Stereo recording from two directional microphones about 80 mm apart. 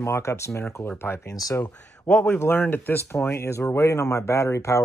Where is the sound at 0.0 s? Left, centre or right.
Left.